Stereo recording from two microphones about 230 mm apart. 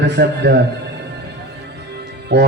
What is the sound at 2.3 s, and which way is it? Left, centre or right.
Speech, right.